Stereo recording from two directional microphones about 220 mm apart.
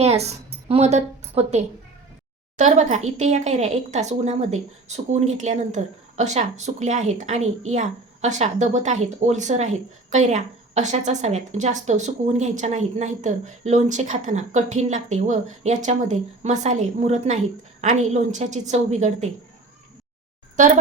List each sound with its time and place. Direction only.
0.0 s a woman's voice: 30° right (ahead or behind)